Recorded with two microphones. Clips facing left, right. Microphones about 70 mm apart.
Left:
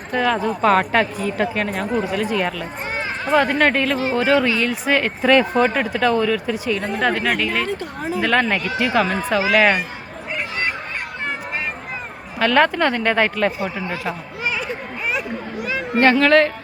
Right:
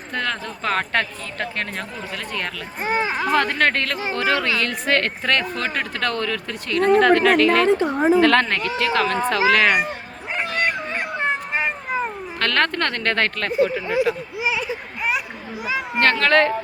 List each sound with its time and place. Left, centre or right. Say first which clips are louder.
0.1 s a woman's voice: left 7 dB; centre
2.8 s a sound: right 6 dB; right
3.3 s speech: left 5 dB; centre
7.8 s a woman's voice: right 8 dB; right
8.2 s speech: right 2 dB; centre
11.5 s a sound: right 4 dB; right
12.4 s speech: left 5 dB; centre
13.8 s speech: right 6 dB; centre
14.4 s a sound: even; centre
16.1 s speech: left 3 dB; centre